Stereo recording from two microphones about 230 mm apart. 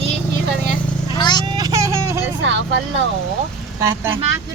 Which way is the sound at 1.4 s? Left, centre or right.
Centre.